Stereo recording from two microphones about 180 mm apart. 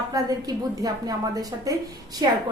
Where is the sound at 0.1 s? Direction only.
20° right (ahead or behind).